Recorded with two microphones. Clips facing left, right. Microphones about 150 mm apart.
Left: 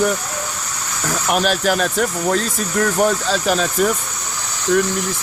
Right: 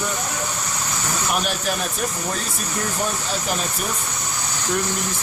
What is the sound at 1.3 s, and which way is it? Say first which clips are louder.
Speech: left 8 dB; 90° left.